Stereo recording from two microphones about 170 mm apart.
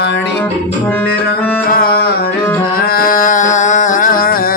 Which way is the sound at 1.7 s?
60° left (ahead or behind).